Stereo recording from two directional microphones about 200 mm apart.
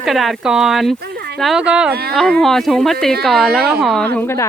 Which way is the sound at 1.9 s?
50° right (ahead or behind).